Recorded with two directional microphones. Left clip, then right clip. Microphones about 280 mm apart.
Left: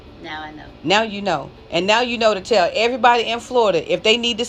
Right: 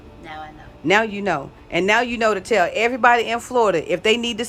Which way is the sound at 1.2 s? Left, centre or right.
Centre.